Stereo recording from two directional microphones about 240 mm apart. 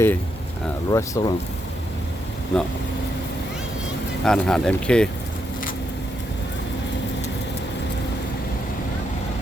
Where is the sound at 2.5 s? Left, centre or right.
Centre.